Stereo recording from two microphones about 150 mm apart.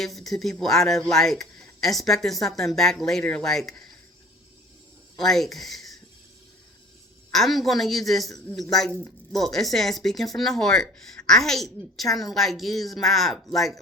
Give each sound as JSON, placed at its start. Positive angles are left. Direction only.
{"t": 0.0, "sound": "speech", "side_deg": 0}
{"t": 5.1, "sound": "speech", "side_deg": 0}
{"t": 7.3, "sound": "speech", "side_deg": 0}
{"t": 9.3, "sound": "speech", "side_deg": 0}